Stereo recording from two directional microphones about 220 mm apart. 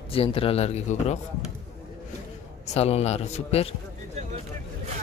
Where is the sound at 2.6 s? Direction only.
30° left (ahead or behind).